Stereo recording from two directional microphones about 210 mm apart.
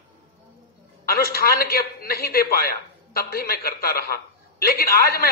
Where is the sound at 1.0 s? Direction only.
45° left (ahead or behind).